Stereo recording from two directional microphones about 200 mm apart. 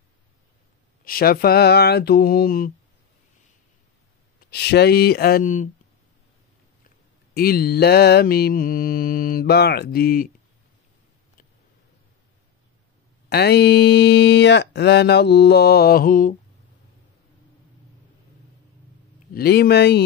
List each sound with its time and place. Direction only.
1.0 s mantra: 45° left (ahead or behind)
4.5 s mantra: 55° left (ahead or behind)
7.3 s mantra: 50° left (ahead or behind)
13.3 s speech: 55° left (ahead or behind)
19.3 s speech: 50° left (ahead or behind)